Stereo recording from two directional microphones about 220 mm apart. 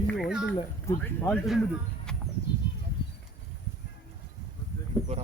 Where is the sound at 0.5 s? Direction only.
15° left (ahead or behind).